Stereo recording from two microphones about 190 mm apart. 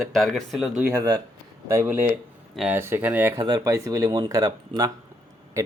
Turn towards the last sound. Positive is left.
turn(degrees=-15)  # may be behind; listen again after turning